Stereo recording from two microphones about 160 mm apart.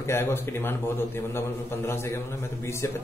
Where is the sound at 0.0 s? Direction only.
15° left (ahead or behind).